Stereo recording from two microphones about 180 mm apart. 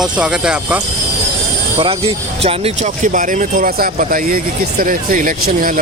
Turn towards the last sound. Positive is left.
turn(degrees=-50)  # may be behind; listen again after turning